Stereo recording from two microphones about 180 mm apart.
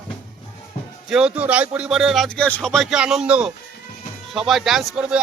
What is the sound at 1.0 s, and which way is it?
Speech, 5° right (ahead or behind).